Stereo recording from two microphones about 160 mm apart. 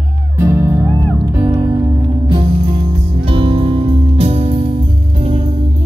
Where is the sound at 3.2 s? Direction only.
30° right (ahead or behind).